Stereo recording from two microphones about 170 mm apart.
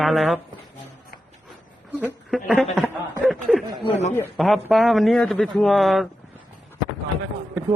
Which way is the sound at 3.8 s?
40° left (ahead or behind).